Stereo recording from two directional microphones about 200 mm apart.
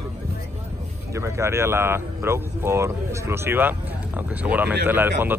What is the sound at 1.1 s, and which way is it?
Speech, 15° right (ahead or behind).